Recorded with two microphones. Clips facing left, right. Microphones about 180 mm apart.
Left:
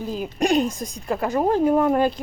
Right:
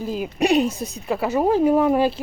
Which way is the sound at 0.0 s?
5° right (ahead or behind).